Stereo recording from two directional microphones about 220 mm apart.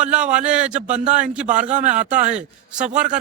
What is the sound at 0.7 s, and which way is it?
A man's voice, 35° right (ahead or behind).